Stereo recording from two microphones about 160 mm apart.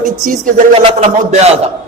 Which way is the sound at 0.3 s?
55° right (ahead or behind).